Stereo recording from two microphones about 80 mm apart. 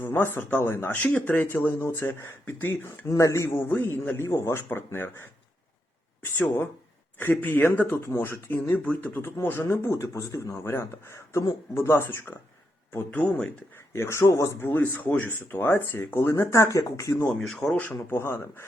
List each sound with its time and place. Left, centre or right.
0.0 s speech: left
1.0 s speech: centre
3.1 s speech: left
3.7 s speech: left
7.2 s speech: left
8.8 s speech: centre
9.1 s speech: left
13.9 s speech: left
16.3 s speech: left
17.4 s speech: centre
17.9 s speech: left